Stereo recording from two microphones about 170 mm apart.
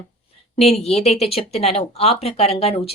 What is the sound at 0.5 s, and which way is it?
Speech, 40° left (ahead or behind).